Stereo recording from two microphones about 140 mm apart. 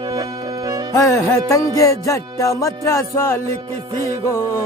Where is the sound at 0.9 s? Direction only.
20° left (ahead or behind).